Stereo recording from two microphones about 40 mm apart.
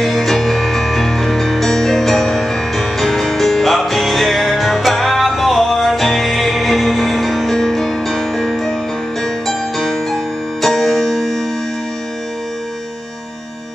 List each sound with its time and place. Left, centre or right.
0.0 s music: centre